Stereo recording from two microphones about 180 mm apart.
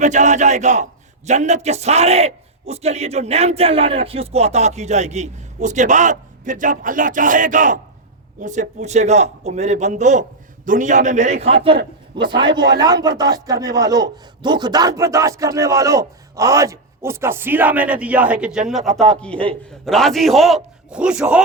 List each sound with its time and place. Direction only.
0.0 s a man's voice: 40° right (ahead or behind); by 19.0 s centre (ahead or behind)
19.3 s a man's voice: 30° right (ahead or behind)
19.8 s a man's voice: centre (ahead or behind)